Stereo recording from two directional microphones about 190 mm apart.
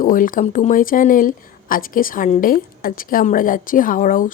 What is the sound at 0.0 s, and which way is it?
Speech, 45° left (ahead or behind).